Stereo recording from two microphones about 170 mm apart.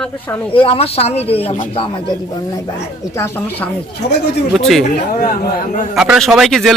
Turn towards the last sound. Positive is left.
turn(degrees=0)  # may be behind; listen again after turning